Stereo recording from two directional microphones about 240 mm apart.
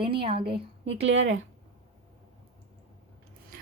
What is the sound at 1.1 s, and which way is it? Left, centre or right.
Speech, right.